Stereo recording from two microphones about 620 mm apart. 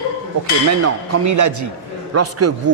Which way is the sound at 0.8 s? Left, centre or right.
Right.